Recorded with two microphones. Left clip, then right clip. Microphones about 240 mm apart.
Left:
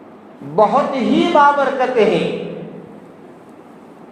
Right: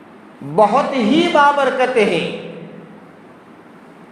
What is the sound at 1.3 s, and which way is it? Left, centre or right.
Speech, right.